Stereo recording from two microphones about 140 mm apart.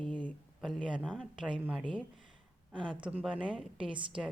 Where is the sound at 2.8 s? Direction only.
35° right (ahead or behind).